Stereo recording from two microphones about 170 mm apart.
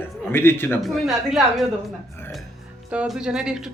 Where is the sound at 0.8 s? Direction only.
Centre (ahead or behind).